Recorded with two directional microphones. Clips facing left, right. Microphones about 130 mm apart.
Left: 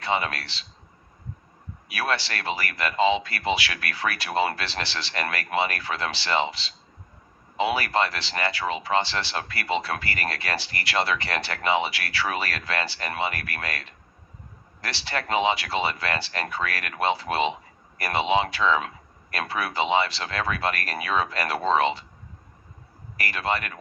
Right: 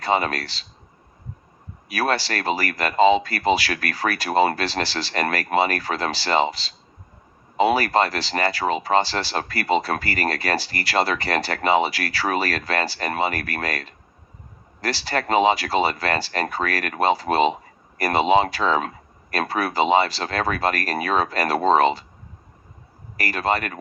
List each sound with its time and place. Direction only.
0.0 s speech: 40° right (ahead or behind)
1.9 s speech: 40° right (ahead or behind)
23.1 s speech: 40° right (ahead or behind)